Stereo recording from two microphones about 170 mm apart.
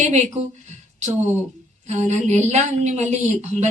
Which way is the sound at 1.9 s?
45° right (ahead or behind).